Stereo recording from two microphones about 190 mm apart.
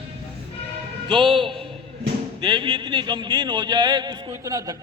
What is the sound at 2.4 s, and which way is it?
A man's voice, 25° right (ahead or behind).